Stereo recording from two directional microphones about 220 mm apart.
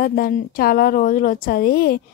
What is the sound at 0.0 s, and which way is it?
Speech, 40° left (ahead or behind).